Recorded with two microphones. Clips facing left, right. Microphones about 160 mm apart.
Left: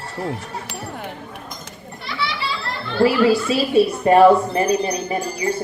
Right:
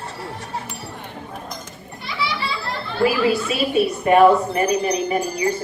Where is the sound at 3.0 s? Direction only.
30° left (ahead or behind).